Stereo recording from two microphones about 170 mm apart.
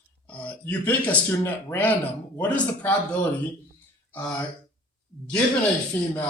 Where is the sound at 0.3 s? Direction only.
10° left (ahead or behind).